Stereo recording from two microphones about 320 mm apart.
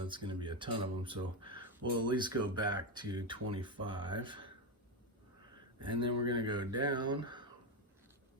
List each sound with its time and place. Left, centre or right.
0.1 s speech: centre
5.8 s speech: centre